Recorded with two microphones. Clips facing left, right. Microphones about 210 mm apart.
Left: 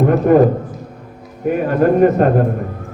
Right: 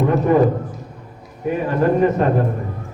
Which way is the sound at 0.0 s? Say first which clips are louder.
Left 4 dB; 55° left (ahead or behind).